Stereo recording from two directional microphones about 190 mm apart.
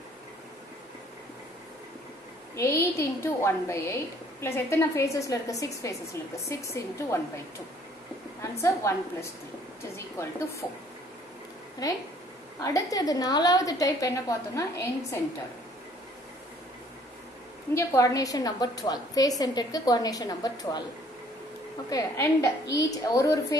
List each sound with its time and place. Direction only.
2.5 s a woman's voice: 15° left (ahead or behind)
8.4 s a woman's voice: 15° left (ahead or behind)
9.9 s a woman's voice: 15° left (ahead or behind)
11.8 s a woman's voice: 20° left (ahead or behind)
17.7 s a woman's voice: 15° left (ahead or behind)
21.8 s a woman's voice: 15° left (ahead or behind)